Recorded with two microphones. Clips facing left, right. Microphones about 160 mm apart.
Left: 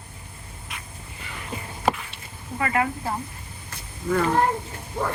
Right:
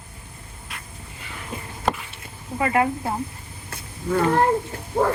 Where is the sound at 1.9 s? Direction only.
5° left (ahead or behind).